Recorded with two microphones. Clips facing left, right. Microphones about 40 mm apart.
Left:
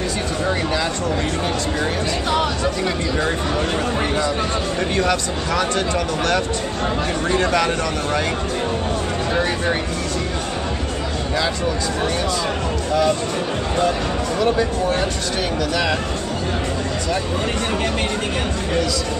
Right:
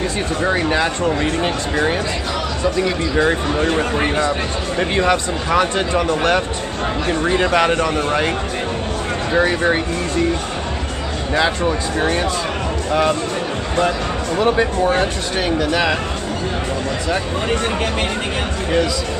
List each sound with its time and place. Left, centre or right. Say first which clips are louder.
0.5 s speech: right 4 dB; right
3.2 s speech: right 7 dB; centre
9.3 s speech: right 6 dB; right
11.3 s speech: right 5 dB; right
15.7 s speech: right 2 dB; right